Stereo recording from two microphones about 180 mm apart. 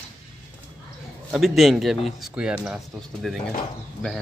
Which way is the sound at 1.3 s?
Centre (ahead or behind).